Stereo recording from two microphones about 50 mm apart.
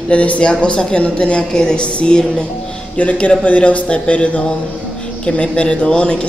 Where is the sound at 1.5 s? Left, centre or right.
Centre.